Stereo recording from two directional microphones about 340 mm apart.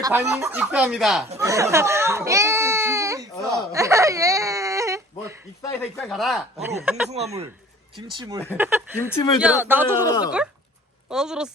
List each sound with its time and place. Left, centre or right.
0.0 s speech: centre
1.3 s baby cry: centre
5.6 s speech: centre
7.1 s speech: centre
9.0 s a woman's voice: centre
9.4 s speech: centre
10.1 s a woman's voice: centre
11.1 s speech: centre